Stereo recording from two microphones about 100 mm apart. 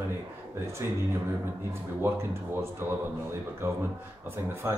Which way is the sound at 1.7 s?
25° right (ahead or behind).